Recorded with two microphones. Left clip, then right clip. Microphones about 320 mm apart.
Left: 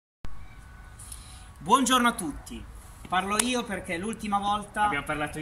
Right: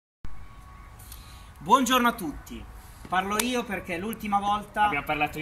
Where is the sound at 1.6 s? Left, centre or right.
Centre.